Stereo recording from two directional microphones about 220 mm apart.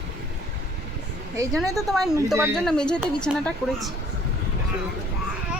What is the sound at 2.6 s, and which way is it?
A woman's voice, 5° left (ahead or behind).